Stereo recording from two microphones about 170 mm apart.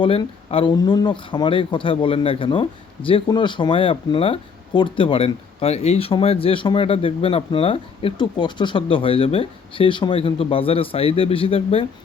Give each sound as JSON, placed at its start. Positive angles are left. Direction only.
{"t": 0.0, "sound": "speech", "side_deg": 30}